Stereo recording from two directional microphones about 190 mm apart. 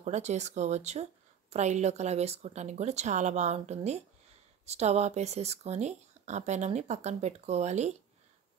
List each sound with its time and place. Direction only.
0.0 s speech: 35° right (ahead or behind)